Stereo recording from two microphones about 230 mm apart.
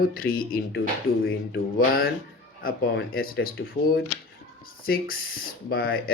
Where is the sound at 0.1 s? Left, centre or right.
Left.